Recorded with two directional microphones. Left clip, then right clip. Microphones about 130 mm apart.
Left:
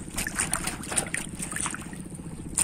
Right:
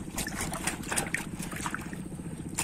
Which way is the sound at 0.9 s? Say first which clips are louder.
Even; 50° left (ahead or behind).